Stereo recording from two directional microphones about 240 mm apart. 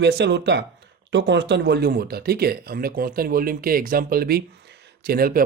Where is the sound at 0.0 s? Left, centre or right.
Right.